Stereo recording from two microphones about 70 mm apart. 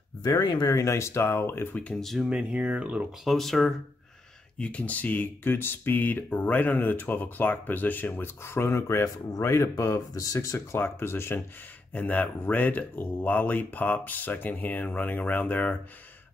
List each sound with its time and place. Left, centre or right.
0.2 s speech: left
0.7 s speech: left
1.8 s speech: centre
2.2 s speech: centre
3.3 s speech: centre
4.6 s speech: centre
8.5 s speech: left
10.8 s speech: left
11.9 s speech: left